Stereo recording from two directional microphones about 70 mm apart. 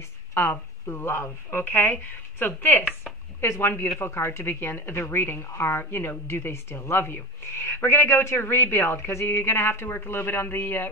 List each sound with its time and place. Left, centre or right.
0.3 s speech: left
3.3 s speech: left